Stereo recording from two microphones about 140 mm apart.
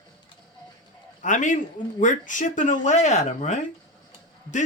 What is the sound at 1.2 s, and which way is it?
Speech, 65° left (ahead or behind).